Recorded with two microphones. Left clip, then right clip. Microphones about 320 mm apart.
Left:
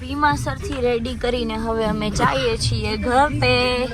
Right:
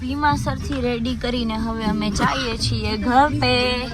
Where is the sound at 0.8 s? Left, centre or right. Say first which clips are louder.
Left 5 dB; centre.